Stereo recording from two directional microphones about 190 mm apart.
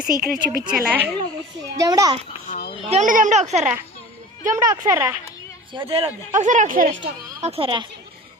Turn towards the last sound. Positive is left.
turn(degrees=-25)  # may be behind; listen again after turning